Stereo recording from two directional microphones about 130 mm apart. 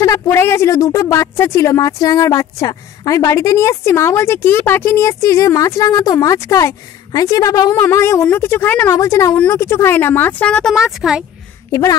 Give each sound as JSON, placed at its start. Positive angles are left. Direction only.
{"t": 0.0, "sound": "speech", "side_deg": 25}